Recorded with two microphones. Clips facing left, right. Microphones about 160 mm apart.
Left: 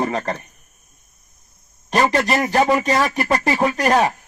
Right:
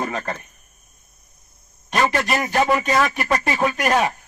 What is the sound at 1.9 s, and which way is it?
A man's voice, 35° left (ahead or behind).